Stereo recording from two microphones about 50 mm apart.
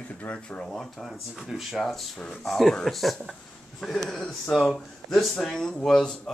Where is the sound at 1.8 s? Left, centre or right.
Centre.